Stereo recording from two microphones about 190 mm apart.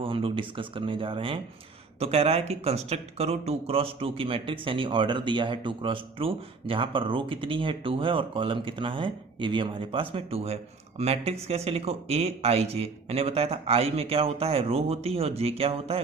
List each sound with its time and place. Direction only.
0.0 s speech: 30° right (ahead or behind)